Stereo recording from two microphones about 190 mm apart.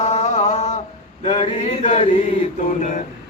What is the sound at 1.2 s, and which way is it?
Male singing, 40° left (ahead or behind).